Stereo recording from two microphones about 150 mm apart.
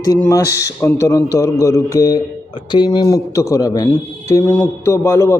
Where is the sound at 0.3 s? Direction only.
20° left (ahead or behind).